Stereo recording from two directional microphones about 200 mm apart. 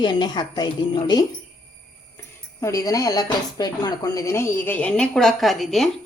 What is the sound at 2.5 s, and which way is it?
Speech, 15° left (ahead or behind).